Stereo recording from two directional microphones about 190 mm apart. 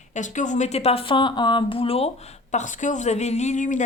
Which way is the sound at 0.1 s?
40° left (ahead or behind).